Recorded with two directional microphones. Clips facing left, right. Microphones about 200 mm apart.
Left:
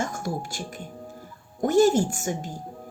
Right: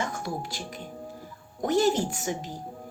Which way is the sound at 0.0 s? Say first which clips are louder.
Left 2 dB; 45° left (ahead or behind).